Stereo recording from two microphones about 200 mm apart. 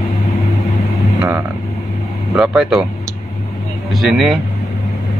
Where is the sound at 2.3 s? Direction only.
Centre (ahead or behind).